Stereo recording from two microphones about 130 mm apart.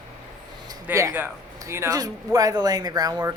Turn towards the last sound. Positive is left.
turn(degrees=-30)  # may be behind; listen again after turning